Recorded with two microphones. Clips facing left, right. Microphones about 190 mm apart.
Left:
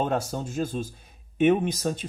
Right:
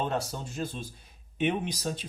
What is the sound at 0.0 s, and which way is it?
Speech, 45° left (ahead or behind).